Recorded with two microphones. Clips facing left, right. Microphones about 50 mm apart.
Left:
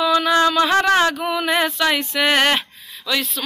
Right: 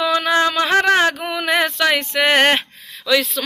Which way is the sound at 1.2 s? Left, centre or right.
Right.